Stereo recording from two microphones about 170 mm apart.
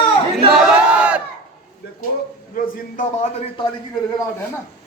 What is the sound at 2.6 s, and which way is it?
Speech, 50° left (ahead or behind).